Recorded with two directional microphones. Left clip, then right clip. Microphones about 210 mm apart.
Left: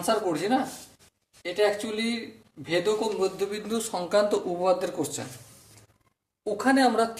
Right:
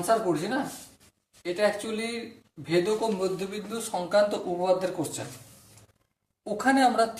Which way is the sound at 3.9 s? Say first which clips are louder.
Even; 25° left (ahead or behind).